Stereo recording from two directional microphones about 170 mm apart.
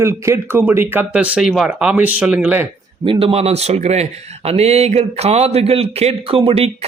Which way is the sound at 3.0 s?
35° right (ahead or behind).